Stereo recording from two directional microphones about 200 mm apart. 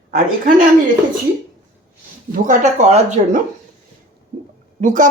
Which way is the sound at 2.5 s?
35° right (ahead or behind).